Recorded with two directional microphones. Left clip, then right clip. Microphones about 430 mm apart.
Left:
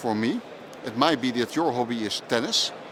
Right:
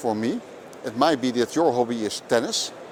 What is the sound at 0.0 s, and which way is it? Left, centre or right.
Speech, right.